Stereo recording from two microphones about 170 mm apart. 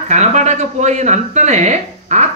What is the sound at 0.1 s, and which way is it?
Speech, 45° right (ahead or behind).